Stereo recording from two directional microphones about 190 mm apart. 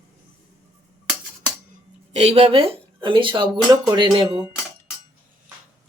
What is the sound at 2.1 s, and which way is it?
Speech, 35° right (ahead or behind).